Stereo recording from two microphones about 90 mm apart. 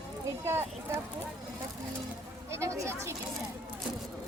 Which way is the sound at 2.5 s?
35° right (ahead or behind).